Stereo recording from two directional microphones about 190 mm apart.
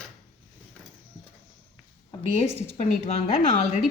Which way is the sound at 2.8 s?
35° left (ahead or behind).